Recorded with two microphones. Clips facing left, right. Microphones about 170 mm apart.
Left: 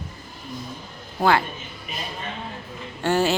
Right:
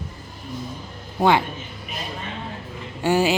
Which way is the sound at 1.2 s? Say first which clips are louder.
Right 2 dB; 20° right (ahead or behind).